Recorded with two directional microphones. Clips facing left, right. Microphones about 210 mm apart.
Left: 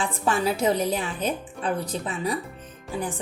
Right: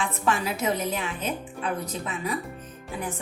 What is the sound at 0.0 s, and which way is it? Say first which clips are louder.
A woman's voice: left 2 dB; 30° left (ahead or behind).